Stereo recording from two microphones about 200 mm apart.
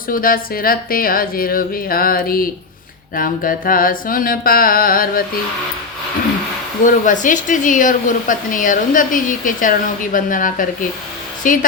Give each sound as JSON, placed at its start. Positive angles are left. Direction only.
{"t": 0.1, "sound": "a woman's voice", "side_deg": 45}
{"t": 6.8, "sound": "a woman's voice", "side_deg": 40}